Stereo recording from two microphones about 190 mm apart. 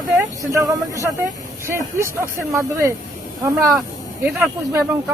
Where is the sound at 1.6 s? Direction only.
15° right (ahead or behind).